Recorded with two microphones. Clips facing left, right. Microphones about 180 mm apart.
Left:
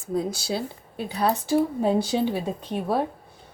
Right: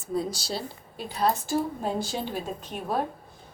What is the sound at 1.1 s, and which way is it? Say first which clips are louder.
A woman's voice: left 3 dB; 65° left (ahead or behind).